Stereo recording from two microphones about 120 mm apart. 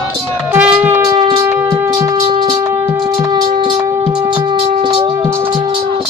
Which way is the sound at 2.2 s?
40° right (ahead or behind).